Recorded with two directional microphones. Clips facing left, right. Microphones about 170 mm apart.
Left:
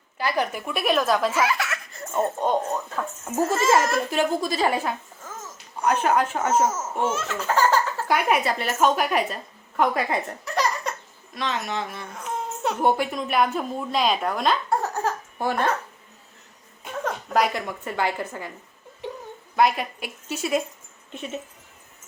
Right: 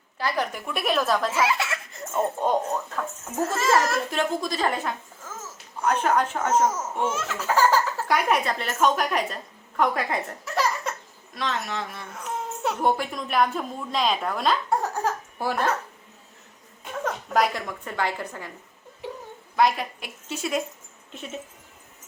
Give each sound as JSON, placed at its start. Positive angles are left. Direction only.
{"t": 0.2, "sound": "speech", "side_deg": 5}
{"t": 1.3, "sound": "chuckle", "side_deg": -25}
{"t": 2.1, "sound": "speech", "side_deg": -5}
{"t": 2.9, "sound": "a child's voice", "side_deg": 5}
{"t": 7.1, "sound": "speech", "side_deg": -10}
{"t": 8.0, "sound": "a woman's voice", "side_deg": 5}
{"t": 14.8, "sound": "laughter", "side_deg": -10}
{"t": 17.0, "sound": "a woman's voice", "side_deg": 0}
{"t": 19.5, "sound": "speech", "side_deg": 0}